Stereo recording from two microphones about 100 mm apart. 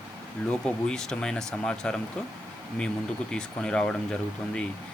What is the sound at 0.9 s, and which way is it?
Speech, 5° left (ahead or behind).